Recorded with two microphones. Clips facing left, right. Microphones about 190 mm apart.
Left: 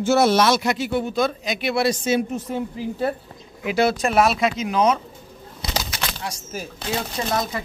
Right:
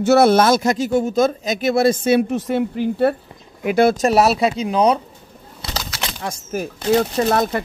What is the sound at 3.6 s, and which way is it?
Speech, 50° right (ahead or behind).